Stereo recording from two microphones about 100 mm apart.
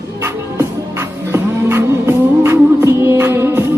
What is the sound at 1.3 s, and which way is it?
Music, 25° right (ahead or behind).